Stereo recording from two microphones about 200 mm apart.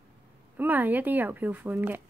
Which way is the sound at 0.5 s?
10° right (ahead or behind).